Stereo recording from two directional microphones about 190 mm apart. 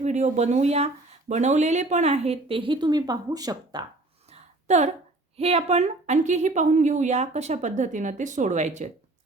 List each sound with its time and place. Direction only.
0.0 s a woman's voice: 40° right (ahead or behind); by 3.8 s 20° right (ahead or behind)
4.3 s a sound: 35° right (ahead or behind)
5.4 s a woman's voice: 30° right (ahead or behind)